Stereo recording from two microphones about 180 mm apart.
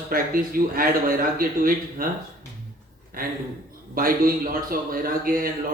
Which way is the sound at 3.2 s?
55° right (ahead or behind).